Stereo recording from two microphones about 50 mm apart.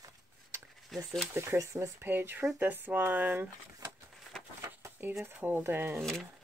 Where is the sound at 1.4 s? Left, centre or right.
Right.